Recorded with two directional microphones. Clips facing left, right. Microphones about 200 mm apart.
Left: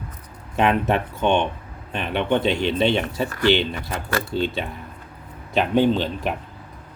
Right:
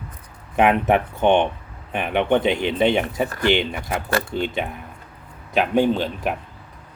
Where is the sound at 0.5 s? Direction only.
15° right (ahead or behind).